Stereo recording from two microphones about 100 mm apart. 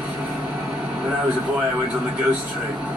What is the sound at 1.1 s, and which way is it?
A man's voice, 15° right (ahead or behind).